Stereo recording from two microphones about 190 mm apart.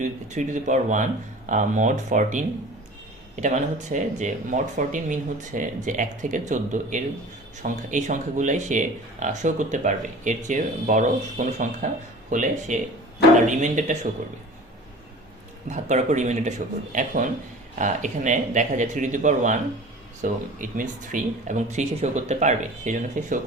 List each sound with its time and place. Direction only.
0.0 s speech: 40° right (ahead or behind)
3.4 s speech: 40° right (ahead or behind)
15.6 s speech: 40° right (ahead or behind)